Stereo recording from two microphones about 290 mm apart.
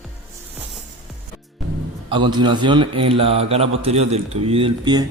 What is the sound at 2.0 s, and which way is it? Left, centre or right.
A man's voice, centre.